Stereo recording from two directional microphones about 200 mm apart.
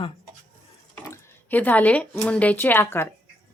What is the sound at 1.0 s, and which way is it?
Speech, 15° left (ahead or behind).